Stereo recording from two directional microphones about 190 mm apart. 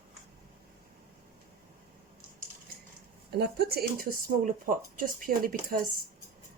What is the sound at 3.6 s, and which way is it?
Speech, 55° right (ahead or behind).